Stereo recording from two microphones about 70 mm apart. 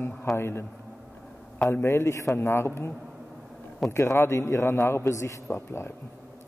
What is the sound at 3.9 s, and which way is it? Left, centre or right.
A man's voice, left.